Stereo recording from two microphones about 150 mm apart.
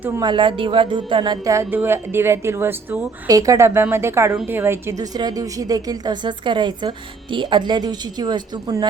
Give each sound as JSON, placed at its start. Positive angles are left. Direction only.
{"t": 0.2, "sound": "a woman's voice", "side_deg": -30}